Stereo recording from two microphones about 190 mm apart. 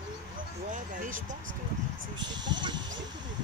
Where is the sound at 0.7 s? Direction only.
45° right (ahead or behind).